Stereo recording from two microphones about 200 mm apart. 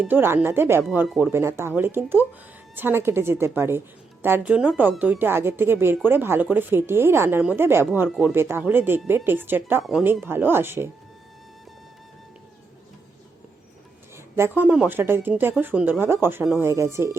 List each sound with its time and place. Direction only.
0.0 s a woman's voice: 10° right (ahead or behind)
14.3 s a woman's voice: 10° right (ahead or behind)